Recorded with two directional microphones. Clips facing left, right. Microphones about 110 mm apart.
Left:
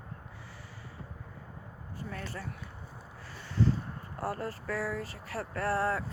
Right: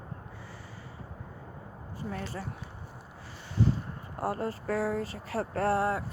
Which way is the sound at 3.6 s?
15° right (ahead or behind).